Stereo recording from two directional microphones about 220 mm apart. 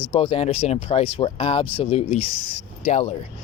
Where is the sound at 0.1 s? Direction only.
25° left (ahead or behind).